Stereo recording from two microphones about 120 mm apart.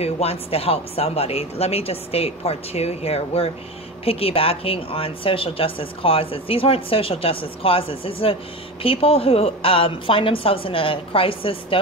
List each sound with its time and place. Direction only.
0.0 s speech: 55° left (ahead or behind)